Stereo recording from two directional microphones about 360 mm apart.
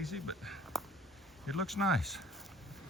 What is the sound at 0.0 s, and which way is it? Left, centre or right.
Speech, centre.